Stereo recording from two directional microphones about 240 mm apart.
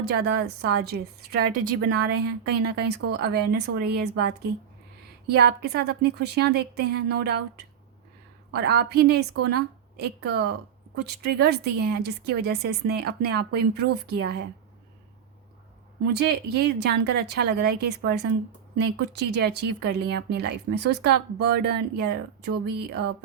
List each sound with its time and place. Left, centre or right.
0.0 s a woman's voice: right
16.0 s speech: right